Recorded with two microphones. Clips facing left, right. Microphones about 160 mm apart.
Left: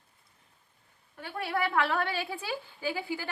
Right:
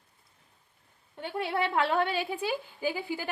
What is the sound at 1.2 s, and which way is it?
A woman's voice, 20° right (ahead or behind).